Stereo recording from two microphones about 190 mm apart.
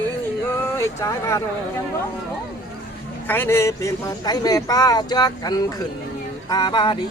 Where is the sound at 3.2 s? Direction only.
10° left (ahead or behind).